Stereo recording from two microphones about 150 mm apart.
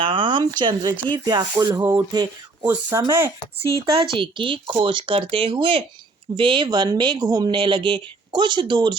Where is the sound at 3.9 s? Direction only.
35° right (ahead or behind).